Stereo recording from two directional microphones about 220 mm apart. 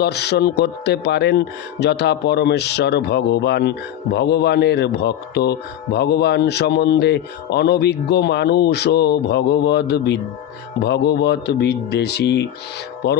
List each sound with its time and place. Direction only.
0.0 s speech: 50° left (ahead or behind)